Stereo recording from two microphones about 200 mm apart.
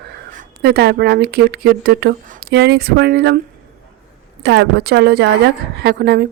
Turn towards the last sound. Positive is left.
turn(degrees=-50)  # may be behind; listen again after turning